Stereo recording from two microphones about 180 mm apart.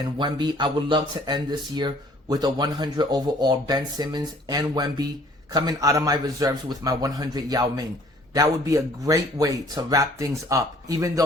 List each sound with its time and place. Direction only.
0.2 s speech: 25° right (ahead or behind)